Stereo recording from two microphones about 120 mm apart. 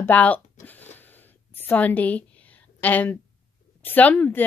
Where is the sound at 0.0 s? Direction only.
15° left (ahead or behind).